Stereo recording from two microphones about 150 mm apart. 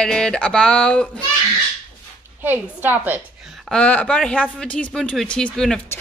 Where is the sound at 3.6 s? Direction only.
5° left (ahead or behind).